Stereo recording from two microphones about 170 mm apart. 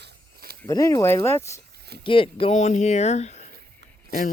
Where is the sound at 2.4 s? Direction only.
40° left (ahead or behind).